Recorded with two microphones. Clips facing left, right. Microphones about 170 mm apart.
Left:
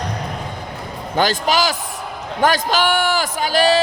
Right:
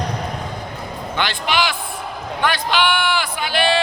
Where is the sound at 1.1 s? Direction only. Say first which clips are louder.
Left 4 dB; 40° left (ahead or behind).